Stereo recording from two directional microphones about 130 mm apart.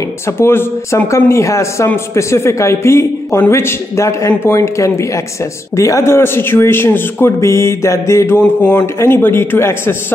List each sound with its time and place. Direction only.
0.4 s a man's voice: 20° left (ahead or behind)
8.4 s a man's voice: 10° left (ahead or behind)